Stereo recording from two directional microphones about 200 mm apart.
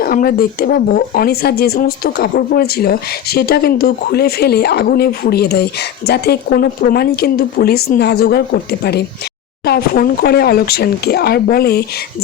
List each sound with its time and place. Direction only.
0.0 s speech: 45° left (ahead or behind)